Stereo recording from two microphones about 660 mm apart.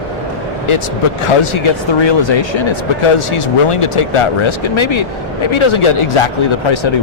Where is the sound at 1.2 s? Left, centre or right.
Left.